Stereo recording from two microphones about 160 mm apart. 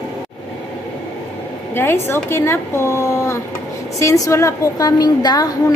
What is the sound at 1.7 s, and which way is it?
A woman's voice, 15° left (ahead or behind).